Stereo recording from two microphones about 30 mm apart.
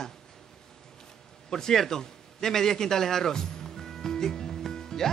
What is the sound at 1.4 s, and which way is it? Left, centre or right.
Speech, centre.